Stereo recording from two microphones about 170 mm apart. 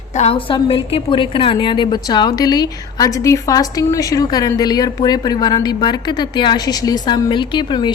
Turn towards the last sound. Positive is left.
turn(degrees=25)  # may be behind; listen again after turning